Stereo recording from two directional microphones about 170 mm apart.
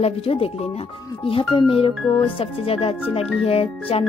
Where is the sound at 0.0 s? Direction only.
35° left (ahead or behind).